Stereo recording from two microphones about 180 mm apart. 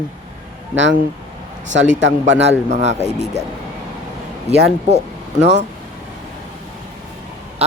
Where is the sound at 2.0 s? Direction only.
90° right.